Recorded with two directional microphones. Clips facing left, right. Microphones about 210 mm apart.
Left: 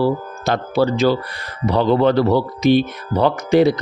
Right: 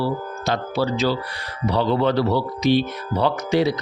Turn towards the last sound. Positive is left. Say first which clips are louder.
# left 5 dB
turn(degrees=50)  # may be behind; listen again after turning